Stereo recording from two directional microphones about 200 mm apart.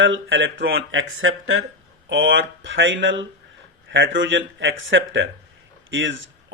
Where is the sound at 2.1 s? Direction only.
70° right (ahead or behind).